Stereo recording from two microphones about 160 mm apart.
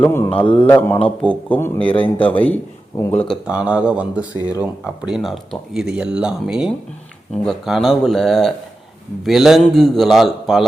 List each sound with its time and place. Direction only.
0.0 s speech: 15° left (ahead or behind)
0.3 s a man's voice: 30° left (ahead or behind)
0.7 s speech: 10° left (ahead or behind)
1.9 s a man's voice: 35° left (ahead or behind)
2.3 s speech: 10° left (ahead or behind)
3.2 s speech: 5° right (ahead or behind)